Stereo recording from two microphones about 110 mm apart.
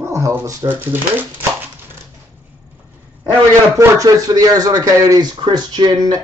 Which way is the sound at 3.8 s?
30° right (ahead or behind).